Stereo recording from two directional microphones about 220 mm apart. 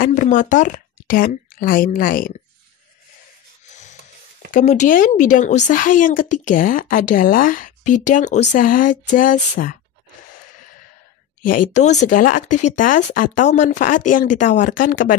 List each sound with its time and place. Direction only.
0.0 s speech: 35° left (ahead or behind)
4.5 s speech: 35° left (ahead or behind)
11.4 s speech: 35° left (ahead or behind)